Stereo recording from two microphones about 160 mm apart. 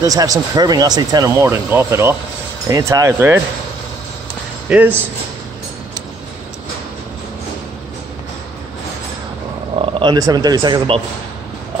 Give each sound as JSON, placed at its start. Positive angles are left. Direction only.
{"t": 0.0, "sound": "speech", "side_deg": -20}
{"t": 4.6, "sound": "speech", "side_deg": -10}
{"t": 9.8, "sound": "speech", "side_deg": -30}